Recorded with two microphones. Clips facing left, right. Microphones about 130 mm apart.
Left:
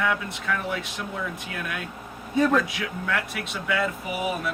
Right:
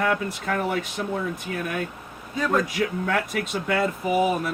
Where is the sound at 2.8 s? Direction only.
45° right (ahead or behind).